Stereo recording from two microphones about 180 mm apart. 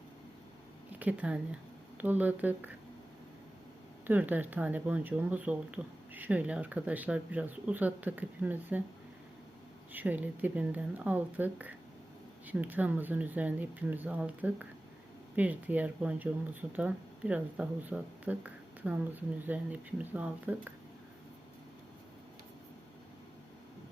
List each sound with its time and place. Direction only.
0.9 s a sound: 10° right (ahead or behind)
2.0 s speech: 10° right (ahead or behind)
4.0 s speech: 10° right (ahead or behind)
9.9 s speech: 10° right (ahead or behind)